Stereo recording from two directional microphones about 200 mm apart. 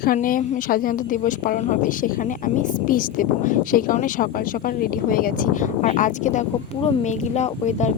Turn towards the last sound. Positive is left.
turn(degrees=35)  # may be behind; listen again after turning